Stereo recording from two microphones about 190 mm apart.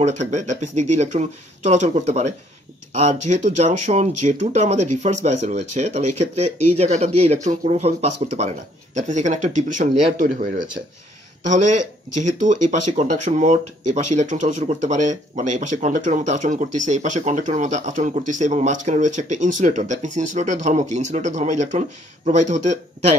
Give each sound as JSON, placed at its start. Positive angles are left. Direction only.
{"t": 0.0, "sound": "speech", "side_deg": -40}